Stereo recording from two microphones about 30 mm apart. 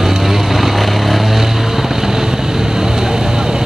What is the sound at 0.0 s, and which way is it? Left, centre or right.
Vehicle, centre.